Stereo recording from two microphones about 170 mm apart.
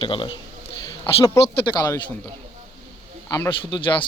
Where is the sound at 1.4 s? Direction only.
25° left (ahead or behind).